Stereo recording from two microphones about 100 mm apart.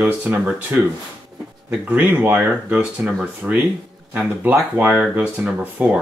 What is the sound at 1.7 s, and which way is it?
Speech, 15° right (ahead or behind).